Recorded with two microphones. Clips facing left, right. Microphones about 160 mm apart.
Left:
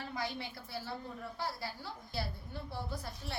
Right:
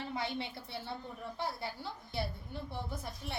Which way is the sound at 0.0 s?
20° right (ahead or behind).